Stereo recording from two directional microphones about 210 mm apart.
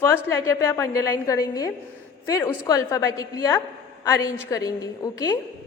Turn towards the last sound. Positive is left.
turn(degrees=15)  # may be behind; listen again after turning